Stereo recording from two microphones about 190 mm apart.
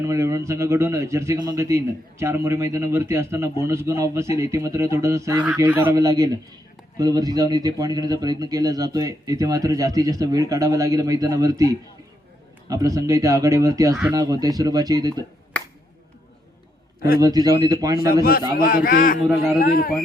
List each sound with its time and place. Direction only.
0.0 s a man's voice: 15° right (ahead or behind)
12.6 s a man's voice: 20° right (ahead or behind)
17.2 s speech: 20° right (ahead or behind)
18.1 s a man's voice: 50° left (ahead or behind)